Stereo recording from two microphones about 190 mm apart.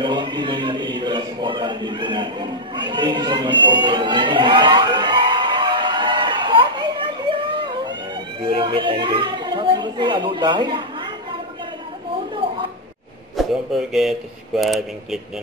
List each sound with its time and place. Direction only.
0.0 s a sound: 25° right (ahead or behind)
8.4 s speech: 25° right (ahead or behind)
13.4 s speech: centre (ahead or behind)